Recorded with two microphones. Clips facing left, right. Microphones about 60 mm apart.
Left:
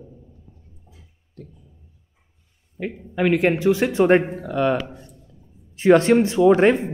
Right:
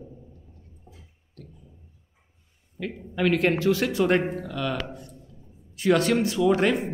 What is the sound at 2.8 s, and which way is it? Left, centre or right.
Speech, left.